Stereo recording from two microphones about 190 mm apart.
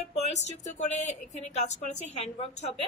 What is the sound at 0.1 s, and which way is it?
A woman's voice, 35° left (ahead or behind).